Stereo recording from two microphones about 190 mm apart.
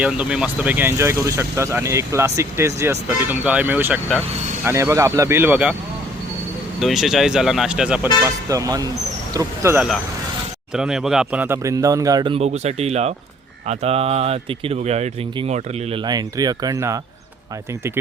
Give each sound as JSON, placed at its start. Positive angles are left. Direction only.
{"t": 0.0, "sound": "speech", "side_deg": -5}
{"t": 6.7, "sound": "speech", "side_deg": 0}
{"t": 8.2, "sound": "speech", "side_deg": -20}
{"t": 10.8, "sound": "speech", "side_deg": -5}
{"t": 16.0, "sound": "speech", "side_deg": -20}